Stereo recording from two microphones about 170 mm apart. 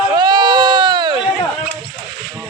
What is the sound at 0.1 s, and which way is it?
Run, 25° right (ahead or behind).